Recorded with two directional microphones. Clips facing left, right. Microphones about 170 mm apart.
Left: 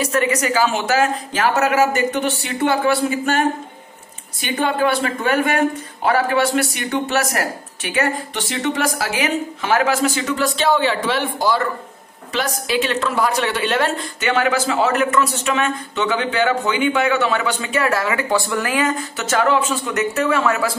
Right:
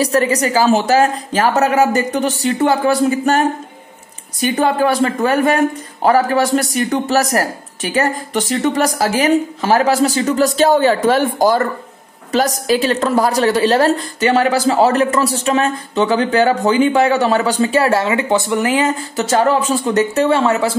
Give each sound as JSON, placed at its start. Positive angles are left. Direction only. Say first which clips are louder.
{"t": 0.0, "sound": "a woman's voice", "louder": "right 4 dB", "side_deg": -35}